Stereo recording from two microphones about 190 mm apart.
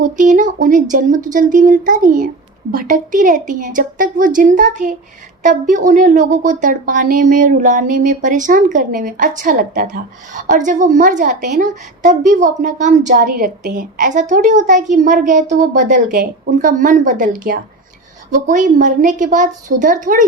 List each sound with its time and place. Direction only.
0.0 s a woman's voice: 40° right (ahead or behind)